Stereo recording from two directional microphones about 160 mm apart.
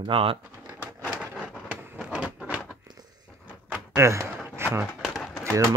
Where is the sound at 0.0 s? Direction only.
35° right (ahead or behind).